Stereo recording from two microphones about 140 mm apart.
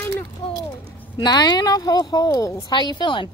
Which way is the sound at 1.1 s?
30° left (ahead or behind).